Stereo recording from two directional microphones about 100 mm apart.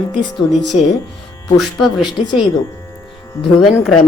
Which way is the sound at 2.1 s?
50° left (ahead or behind).